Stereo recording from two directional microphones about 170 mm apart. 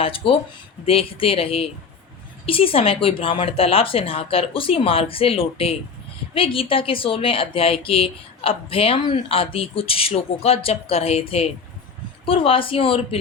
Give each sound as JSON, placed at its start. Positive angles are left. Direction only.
{"t": 0.0, "sound": "speech", "side_deg": 30}